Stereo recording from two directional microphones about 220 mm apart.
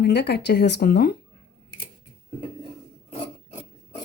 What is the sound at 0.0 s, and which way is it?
A woman's voice, 50° left (ahead or behind).